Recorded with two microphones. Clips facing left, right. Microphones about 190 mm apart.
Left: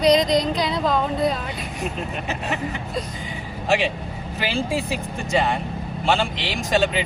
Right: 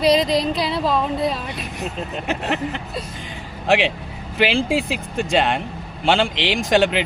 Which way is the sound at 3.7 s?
65° right (ahead or behind).